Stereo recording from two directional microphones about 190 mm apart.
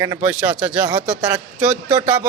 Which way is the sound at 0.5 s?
5° right (ahead or behind).